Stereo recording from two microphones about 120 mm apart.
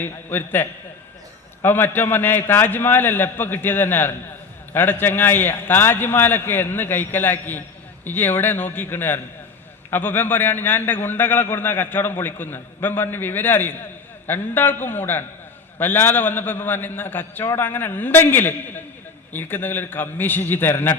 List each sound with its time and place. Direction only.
0.0 s a man's voice: 15° left (ahead or behind)